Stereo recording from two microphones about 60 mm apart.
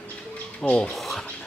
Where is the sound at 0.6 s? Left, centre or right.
Left.